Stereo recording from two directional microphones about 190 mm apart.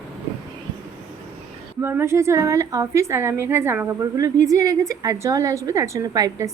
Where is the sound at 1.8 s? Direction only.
15° right (ahead or behind).